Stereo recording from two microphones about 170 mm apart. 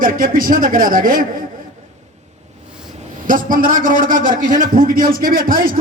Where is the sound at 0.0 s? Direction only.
55° right (ahead or behind).